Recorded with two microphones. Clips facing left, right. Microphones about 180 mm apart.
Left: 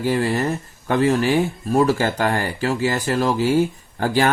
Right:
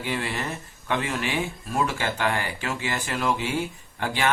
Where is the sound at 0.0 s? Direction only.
40° left (ahead or behind).